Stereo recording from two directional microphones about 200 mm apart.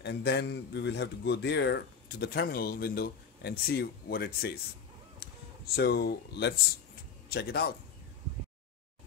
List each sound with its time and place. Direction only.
0.0 s a man's voice: 55° left (ahead or behind)
5.8 s speech: 50° left (ahead or behind)